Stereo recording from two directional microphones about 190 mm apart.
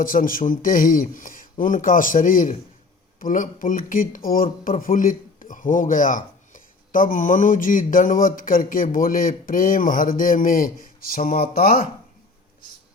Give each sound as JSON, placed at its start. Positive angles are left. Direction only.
{"t": 0.0, "sound": "speech", "side_deg": 45}
{"t": 4.4, "sound": "speech", "side_deg": 35}
{"t": 4.8, "sound": "speech", "side_deg": 45}